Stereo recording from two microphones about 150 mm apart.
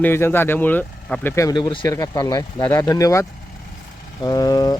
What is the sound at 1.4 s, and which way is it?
A man's voice, 30° left (ahead or behind).